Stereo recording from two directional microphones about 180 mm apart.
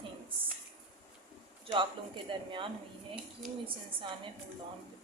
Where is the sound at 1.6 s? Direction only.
25° right (ahead or behind).